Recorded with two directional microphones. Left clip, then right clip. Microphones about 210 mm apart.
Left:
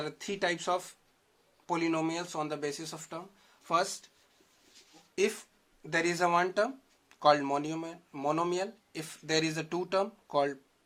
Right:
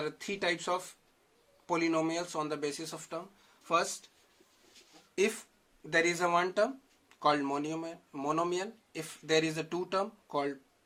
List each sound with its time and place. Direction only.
0.0 s speech: 20° left (ahead or behind)
5.1 s speech: centre (ahead or behind)
5.9 s speech: 15° left (ahead or behind)